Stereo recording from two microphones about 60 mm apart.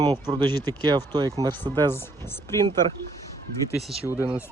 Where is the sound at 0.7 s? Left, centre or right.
Right.